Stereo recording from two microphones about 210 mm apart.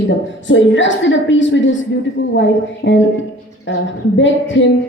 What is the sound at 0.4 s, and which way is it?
A woman's voice, 60° left (ahead or behind).